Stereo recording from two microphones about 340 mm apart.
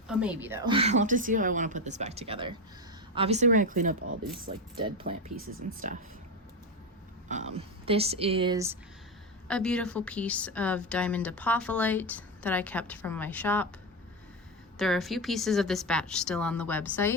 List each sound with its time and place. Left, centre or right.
0.1 s a woman's voice: centre
7.3 s speech: centre
9.5 s a woman's voice: centre
14.8 s a woman's voice: centre